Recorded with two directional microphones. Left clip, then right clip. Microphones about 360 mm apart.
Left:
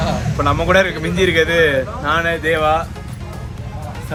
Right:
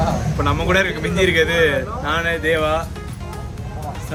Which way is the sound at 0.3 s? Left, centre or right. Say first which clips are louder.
Left 5 dB; centre.